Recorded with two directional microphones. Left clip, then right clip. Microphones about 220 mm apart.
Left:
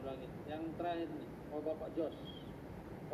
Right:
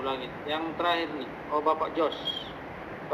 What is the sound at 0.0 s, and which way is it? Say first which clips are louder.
Speech: right 14 dB; 35° right (ahead or behind).